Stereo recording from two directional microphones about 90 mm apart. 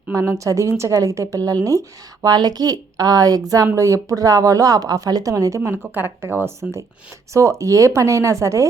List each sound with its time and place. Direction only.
0.1 s speech: 35° right (ahead or behind)
5.9 s a woman's voice: 25° right (ahead or behind)